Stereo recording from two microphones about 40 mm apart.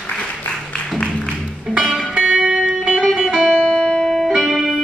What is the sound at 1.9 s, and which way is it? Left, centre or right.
Music, right.